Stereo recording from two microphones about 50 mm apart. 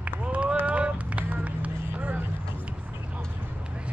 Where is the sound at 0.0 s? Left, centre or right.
Right.